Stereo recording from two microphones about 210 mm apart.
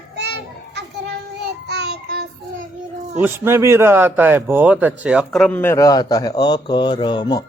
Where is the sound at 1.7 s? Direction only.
50° right (ahead or behind).